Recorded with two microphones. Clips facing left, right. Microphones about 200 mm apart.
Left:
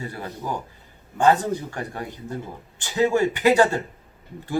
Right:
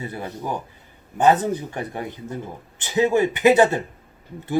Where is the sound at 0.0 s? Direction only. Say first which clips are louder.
Right 2 dB; 20° right (ahead or behind).